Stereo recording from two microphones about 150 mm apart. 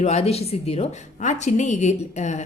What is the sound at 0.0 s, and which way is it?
A woman's voice, 45° left (ahead or behind).